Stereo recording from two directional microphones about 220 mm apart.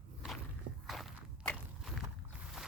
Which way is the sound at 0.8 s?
Centre (ahead or behind).